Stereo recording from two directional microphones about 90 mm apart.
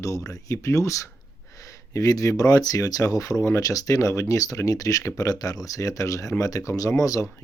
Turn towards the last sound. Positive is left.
turn(degrees=40)  # may be behind; listen again after turning